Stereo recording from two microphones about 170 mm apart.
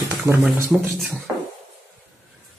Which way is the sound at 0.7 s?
Centre (ahead or behind).